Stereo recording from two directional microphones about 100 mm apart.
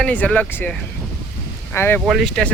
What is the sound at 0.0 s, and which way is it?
Speech, 10° left (ahead or behind).